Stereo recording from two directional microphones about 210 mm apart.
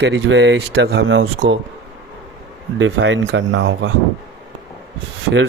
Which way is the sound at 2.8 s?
60° right (ahead or behind).